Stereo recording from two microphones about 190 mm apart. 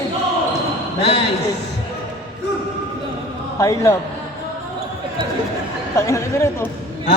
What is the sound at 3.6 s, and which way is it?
Speech, 20° left (ahead or behind).